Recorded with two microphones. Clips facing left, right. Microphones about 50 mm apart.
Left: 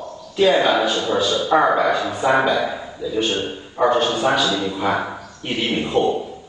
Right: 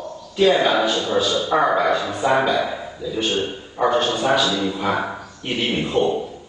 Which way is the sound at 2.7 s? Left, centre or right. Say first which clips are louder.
Left 1 dB; centre.